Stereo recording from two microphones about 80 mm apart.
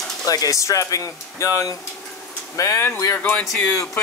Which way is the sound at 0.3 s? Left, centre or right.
Left.